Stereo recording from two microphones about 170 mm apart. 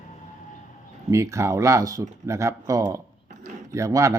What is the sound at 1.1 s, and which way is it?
Speech, 15° right (ahead or behind).